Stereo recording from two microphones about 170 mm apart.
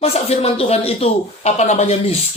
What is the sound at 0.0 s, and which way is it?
Speech, 35° left (ahead or behind).